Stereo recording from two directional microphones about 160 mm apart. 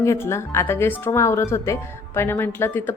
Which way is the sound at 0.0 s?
15° left (ahead or behind).